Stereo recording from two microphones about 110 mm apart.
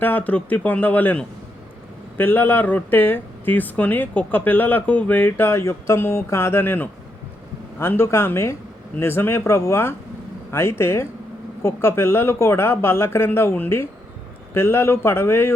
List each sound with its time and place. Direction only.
0.0 s speech: 15° left (ahead or behind)